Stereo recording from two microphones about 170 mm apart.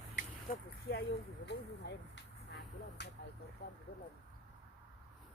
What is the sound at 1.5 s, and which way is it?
Speech, 90° left.